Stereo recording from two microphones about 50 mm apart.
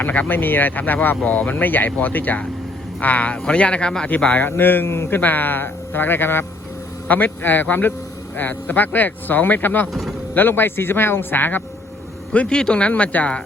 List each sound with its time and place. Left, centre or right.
0.0 s speech: left; by 4.1 s centre
4.3 s speech: left
9.9 s speech: centre
10.3 s speech: left
12.3 s speech: left
12.9 s speech: left